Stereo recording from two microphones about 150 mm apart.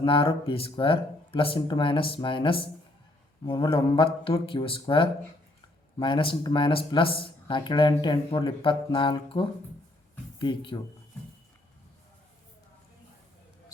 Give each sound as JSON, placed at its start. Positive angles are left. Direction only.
{"t": 0.0, "sound": "speech", "side_deg": 35}